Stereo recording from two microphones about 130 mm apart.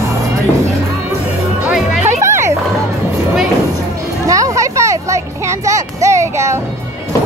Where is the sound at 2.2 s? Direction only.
20° right (ahead or behind).